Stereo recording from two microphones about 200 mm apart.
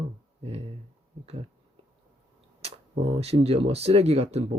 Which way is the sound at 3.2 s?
30° right (ahead or behind).